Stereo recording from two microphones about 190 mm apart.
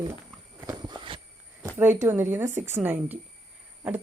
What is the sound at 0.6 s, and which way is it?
Walk, 20° right (ahead or behind).